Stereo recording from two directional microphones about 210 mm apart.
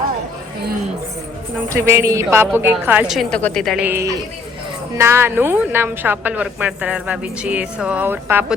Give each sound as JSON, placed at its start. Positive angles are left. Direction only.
{"t": 1.7, "sound": "a woman's voice", "side_deg": -15}